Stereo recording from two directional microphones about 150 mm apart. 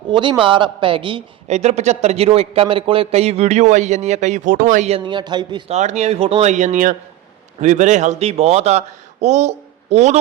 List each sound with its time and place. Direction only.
0.1 s speech: 30° right (ahead or behind)
1.5 s a man's voice: 50° right (ahead or behind)
4.9 s speech: 30° right (ahead or behind)
5.7 s a man's voice: 50° right (ahead or behind)